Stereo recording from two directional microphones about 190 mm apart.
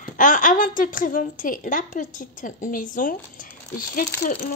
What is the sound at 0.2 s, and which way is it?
Speech, 45° left (ahead or behind).